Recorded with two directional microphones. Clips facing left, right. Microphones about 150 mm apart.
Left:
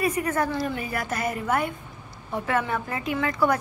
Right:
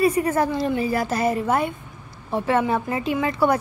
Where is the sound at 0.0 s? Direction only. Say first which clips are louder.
Right 5 dB; 30° right (ahead or behind).